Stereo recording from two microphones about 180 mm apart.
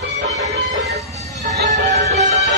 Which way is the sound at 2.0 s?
40° right (ahead or behind).